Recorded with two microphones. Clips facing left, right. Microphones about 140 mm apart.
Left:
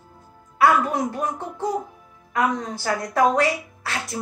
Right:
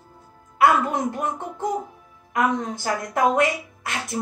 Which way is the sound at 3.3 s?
20° right (ahead or behind).